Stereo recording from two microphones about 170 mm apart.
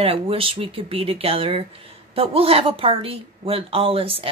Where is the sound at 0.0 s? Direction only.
35° right (ahead or behind).